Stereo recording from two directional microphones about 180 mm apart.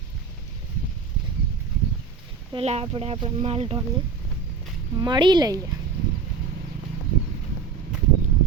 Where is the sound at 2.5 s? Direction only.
35° right (ahead or behind).